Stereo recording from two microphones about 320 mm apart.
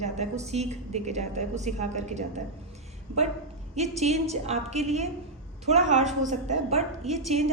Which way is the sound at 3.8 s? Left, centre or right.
Right.